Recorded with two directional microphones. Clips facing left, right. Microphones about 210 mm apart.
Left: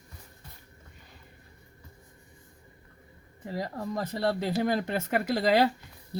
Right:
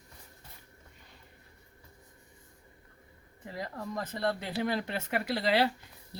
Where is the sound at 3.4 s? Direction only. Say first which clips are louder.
Left 5 dB; 35° left (ahead or behind).